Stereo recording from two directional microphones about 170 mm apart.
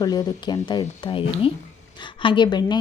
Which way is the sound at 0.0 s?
25° left (ahead or behind).